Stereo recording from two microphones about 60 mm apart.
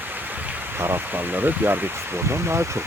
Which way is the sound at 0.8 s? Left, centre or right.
Right.